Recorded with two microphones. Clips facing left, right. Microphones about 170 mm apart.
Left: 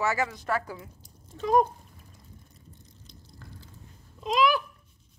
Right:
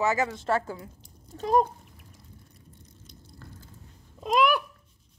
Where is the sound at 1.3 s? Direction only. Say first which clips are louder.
Even; 40° right (ahead or behind).